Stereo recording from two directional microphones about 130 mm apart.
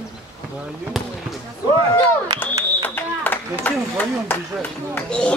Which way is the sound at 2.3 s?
15° left (ahead or behind).